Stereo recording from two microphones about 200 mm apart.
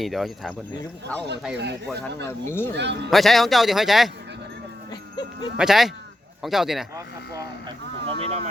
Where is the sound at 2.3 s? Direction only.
10° left (ahead or behind).